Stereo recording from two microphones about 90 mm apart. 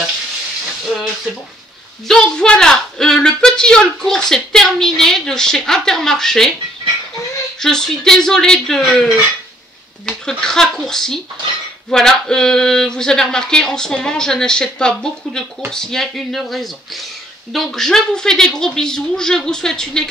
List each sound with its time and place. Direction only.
0.8 s speech: centre (ahead or behind)
7.6 s speech: 5° left (ahead or behind)